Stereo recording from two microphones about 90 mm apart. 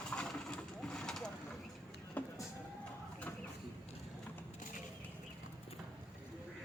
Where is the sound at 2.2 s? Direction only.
15° left (ahead or behind).